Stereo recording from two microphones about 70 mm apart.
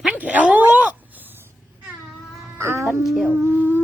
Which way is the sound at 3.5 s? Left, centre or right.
Right.